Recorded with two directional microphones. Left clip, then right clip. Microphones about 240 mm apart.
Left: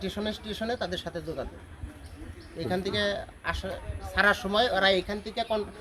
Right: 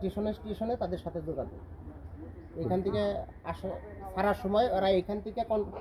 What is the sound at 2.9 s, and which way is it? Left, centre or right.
Speech, centre.